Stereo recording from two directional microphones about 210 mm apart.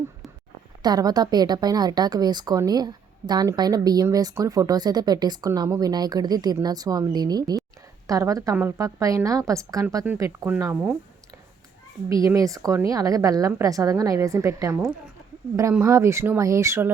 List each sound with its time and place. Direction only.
0.8 s a woman's voice: 20° right (ahead or behind)
12.0 s a woman's voice: 15° right (ahead or behind)